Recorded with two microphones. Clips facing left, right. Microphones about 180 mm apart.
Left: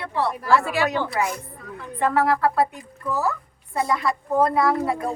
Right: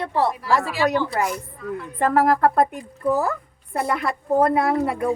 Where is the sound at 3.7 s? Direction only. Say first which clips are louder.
Even; 60° right (ahead or behind).